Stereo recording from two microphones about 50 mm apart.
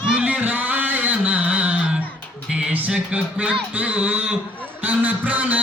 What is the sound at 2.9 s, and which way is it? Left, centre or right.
Speech, right.